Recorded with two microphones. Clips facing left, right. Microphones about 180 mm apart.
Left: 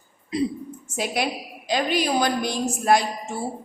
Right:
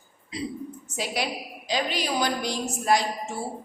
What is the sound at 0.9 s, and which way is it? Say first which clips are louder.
A woman's voice: left 4 dB; 55° left (ahead or behind).